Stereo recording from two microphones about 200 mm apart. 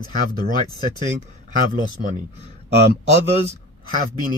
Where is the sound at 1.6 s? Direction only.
45° right (ahead or behind).